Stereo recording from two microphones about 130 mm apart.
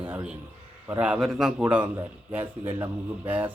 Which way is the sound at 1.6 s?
15° right (ahead or behind).